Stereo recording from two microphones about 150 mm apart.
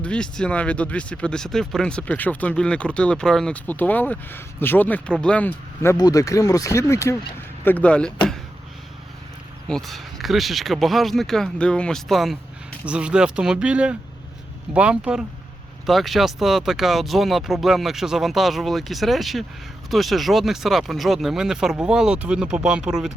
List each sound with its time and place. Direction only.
0.0 s speech: 5° left (ahead or behind)
9.6 s speech: centre (ahead or behind)